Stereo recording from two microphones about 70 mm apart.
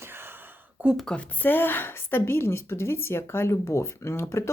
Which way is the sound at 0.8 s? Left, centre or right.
Right.